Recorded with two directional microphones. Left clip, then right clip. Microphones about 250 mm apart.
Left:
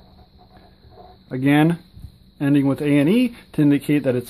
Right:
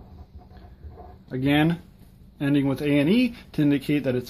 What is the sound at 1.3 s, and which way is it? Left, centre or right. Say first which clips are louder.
Speech: left 5 dB; left.